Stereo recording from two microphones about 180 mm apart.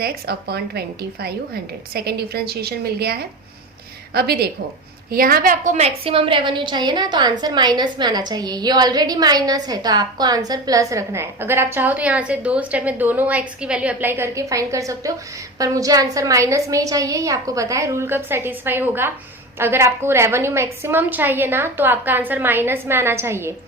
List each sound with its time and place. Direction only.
0.0 s a woman's voice: 60° right (ahead or behind); by 23.6 s 15° right (ahead or behind)